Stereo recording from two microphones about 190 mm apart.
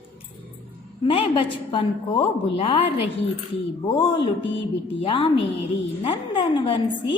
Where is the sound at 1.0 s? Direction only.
30° left (ahead or behind).